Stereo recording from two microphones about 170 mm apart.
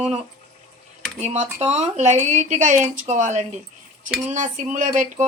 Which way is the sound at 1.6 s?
40° right (ahead or behind).